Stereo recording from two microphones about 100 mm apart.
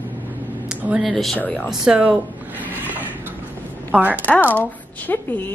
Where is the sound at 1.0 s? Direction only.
Centre (ahead or behind).